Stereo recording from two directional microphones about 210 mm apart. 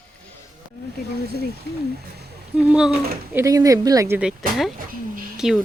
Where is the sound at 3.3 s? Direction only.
15° right (ahead or behind).